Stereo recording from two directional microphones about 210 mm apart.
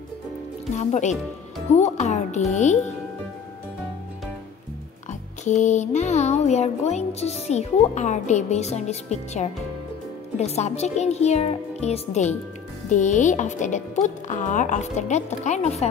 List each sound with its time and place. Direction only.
0.7 s music: 35° left (ahead or behind)
5.4 s music: 35° left (ahead or behind)